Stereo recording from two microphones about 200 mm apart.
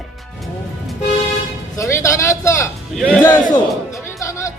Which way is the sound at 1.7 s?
15° left (ahead or behind).